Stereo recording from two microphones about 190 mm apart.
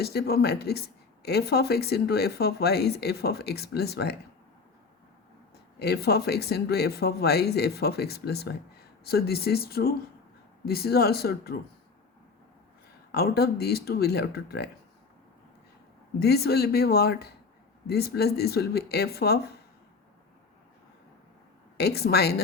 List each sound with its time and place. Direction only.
0.0 s speech: 55° left (ahead or behind)
5.8 s speech: 60° left (ahead or behind)
13.1 s speech: 55° left (ahead or behind)
16.2 s speech: 55° left (ahead or behind)
21.8 s speech: 55° left (ahead or behind)